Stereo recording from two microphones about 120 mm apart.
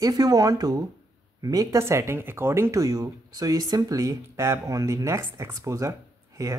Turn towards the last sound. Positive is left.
turn(degrees=-25)  # may be behind; listen again after turning